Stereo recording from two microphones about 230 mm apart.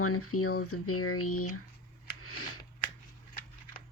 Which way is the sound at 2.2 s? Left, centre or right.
Left.